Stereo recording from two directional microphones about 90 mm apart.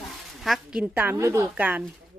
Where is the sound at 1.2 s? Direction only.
35° right (ahead or behind).